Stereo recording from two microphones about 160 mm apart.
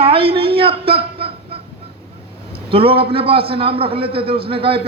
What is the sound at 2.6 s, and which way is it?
A man's voice, 35° right (ahead or behind).